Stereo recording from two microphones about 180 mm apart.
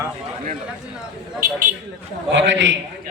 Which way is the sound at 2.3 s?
90° right.